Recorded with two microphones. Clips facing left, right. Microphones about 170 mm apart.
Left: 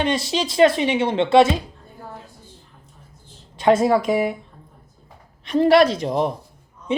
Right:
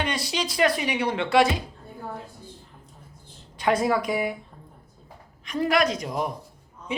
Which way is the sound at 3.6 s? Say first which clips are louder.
Left 6 dB; 25° left (ahead or behind).